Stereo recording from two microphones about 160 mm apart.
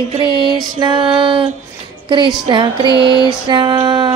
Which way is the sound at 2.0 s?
30° right (ahead or behind).